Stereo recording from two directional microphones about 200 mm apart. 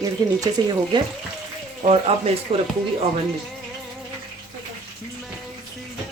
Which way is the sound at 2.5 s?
30° right (ahead or behind).